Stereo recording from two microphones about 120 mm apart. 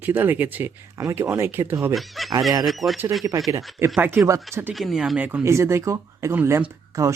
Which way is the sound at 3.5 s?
20° right (ahead or behind).